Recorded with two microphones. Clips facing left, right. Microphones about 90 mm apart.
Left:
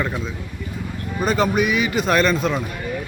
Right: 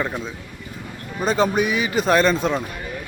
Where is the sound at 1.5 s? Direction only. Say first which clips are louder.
Left 1 dB; 30° right (ahead or behind).